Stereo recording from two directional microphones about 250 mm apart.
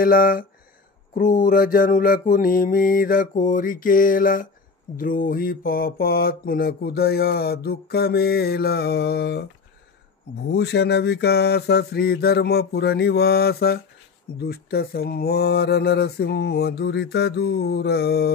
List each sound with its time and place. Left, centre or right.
0.0 s mantra: left
10.5 s mantra: left